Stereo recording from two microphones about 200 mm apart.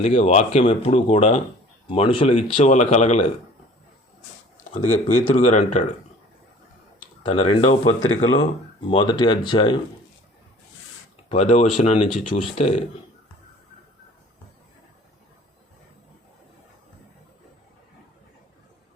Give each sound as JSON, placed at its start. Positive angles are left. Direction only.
{"t": 0.0, "sound": "speech", "side_deg": 30}
{"t": 4.9, "sound": "speech", "side_deg": 40}
{"t": 7.2, "sound": "speech", "side_deg": 25}
{"t": 11.3, "sound": "speech", "side_deg": 30}